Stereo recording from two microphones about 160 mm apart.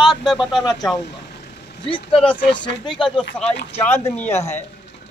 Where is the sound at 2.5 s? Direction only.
30° left (ahead or behind).